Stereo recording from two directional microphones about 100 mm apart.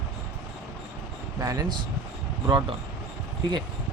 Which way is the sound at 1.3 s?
35° right (ahead or behind).